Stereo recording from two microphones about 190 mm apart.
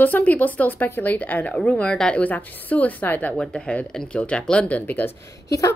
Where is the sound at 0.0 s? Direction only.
10° left (ahead or behind).